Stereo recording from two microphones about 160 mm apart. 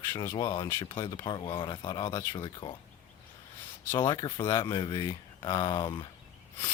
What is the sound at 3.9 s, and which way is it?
Speech, 20° left (ahead or behind).